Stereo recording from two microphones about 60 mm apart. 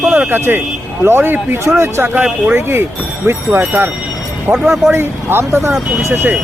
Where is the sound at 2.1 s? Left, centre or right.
Right.